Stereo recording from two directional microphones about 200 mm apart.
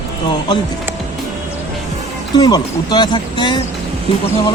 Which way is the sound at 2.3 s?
20° left (ahead or behind).